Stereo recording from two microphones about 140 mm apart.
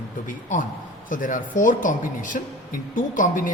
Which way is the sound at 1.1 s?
75° left (ahead or behind).